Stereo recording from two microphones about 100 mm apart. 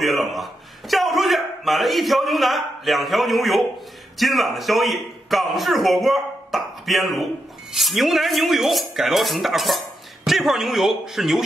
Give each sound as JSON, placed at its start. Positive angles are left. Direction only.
{"t": 0.0, "sound": "a man's voice", "side_deg": 0}